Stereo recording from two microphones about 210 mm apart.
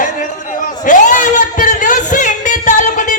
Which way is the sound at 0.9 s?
35° left (ahead or behind).